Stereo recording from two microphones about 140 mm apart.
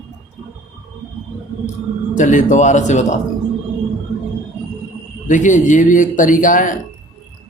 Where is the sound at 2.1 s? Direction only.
60° left (ahead or behind).